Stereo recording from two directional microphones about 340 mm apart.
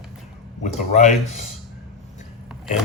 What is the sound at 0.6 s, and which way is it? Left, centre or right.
Speech, left.